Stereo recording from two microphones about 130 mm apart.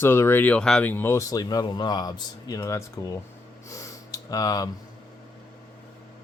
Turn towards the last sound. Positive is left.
turn(degrees=25)  # may be behind; listen again after turning